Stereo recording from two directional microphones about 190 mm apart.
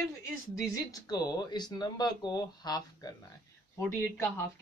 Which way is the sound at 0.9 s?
20° left (ahead or behind).